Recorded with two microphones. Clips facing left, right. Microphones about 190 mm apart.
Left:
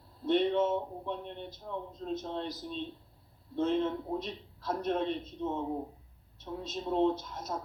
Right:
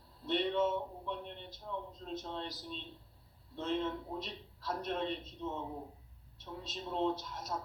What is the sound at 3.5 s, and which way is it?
Speech, 50° left (ahead or behind).